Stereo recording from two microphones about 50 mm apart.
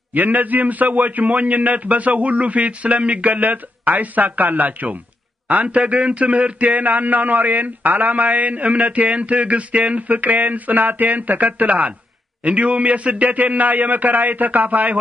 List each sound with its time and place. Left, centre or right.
0.1 s speech: right